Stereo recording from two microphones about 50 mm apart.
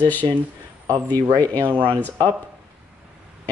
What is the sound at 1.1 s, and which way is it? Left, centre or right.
Speech, left.